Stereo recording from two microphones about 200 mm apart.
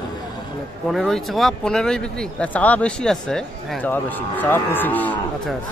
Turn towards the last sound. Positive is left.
turn(degrees=10)  # may be behind; listen again after turning